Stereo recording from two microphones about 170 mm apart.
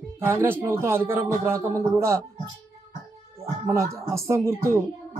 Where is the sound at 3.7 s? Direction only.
15° right (ahead or behind).